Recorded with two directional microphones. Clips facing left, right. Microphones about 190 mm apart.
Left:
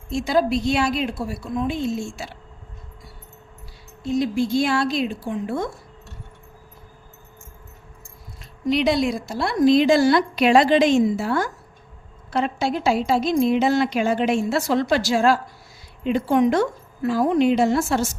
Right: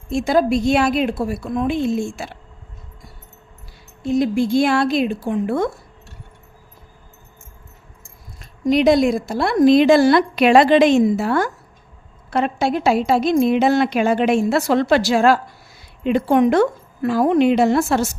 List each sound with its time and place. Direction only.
0.1 s a woman's voice: 50° right (ahead or behind)
4.0 s speech: 55° right (ahead or behind)
8.4 s speech: 50° right (ahead or behind); by 18.1 s 65° right (ahead or behind)